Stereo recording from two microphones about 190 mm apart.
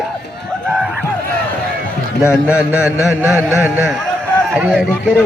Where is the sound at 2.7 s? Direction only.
5° right (ahead or behind).